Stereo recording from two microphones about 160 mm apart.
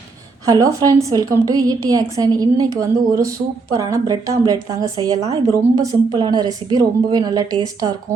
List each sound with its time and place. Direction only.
0.4 s a woman's voice: 20° right (ahead or behind)